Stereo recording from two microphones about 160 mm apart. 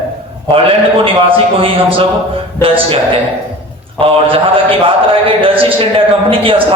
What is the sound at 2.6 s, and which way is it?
Speech, 35° right (ahead or behind).